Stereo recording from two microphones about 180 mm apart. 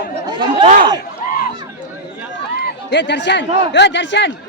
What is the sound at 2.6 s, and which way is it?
A man's voice, 75° left (ahead or behind).